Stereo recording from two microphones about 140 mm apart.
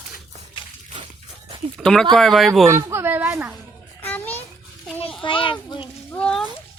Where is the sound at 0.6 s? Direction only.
35° left (ahead or behind).